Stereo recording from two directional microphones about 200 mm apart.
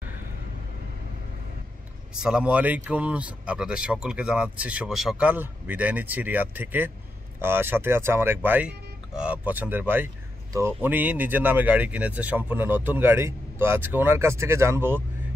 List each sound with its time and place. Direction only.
2.1 s speech: 5° right (ahead or behind)